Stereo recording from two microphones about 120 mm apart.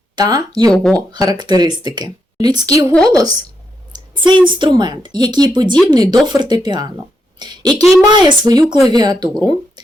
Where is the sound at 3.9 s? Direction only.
40° right (ahead or behind).